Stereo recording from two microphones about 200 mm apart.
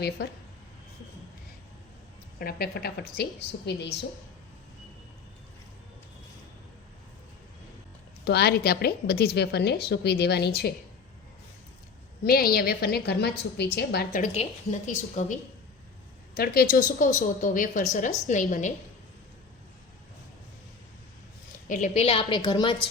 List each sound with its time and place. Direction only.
0.2 s a woman's voice: 55° left (ahead or behind)
2.4 s a woman's voice: 50° left (ahead or behind)
8.2 s a woman's voice: 55° left (ahead or behind)
12.2 s a woman's voice: 50° left (ahead or behind)
16.3 s speech: 50° left (ahead or behind)
21.7 s a woman's voice: 40° left (ahead or behind); by 22.7 s 20° left (ahead or behind)